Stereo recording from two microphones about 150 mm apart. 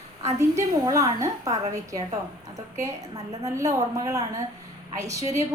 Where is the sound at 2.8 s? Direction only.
20° right (ahead or behind).